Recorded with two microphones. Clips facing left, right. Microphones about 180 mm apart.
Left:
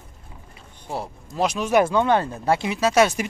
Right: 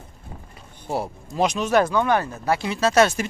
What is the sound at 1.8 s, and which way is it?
Speech, 25° left (ahead or behind).